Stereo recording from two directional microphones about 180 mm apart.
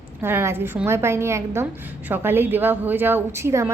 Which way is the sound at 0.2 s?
10° right (ahead or behind).